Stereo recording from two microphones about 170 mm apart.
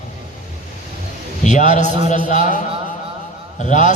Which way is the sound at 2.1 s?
30° right (ahead or behind).